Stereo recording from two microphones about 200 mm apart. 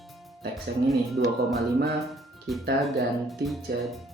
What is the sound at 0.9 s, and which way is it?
Speech, centre (ahead or behind).